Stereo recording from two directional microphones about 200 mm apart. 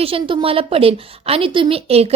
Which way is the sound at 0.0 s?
25° right (ahead or behind).